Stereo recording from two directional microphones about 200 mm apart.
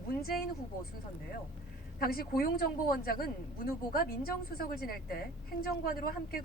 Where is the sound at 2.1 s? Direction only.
50° left (ahead or behind).